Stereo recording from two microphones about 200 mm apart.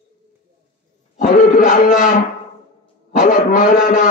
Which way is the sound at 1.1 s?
40° left (ahead or behind).